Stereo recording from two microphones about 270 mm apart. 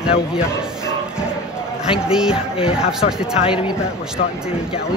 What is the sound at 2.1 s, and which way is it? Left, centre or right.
Speech, centre.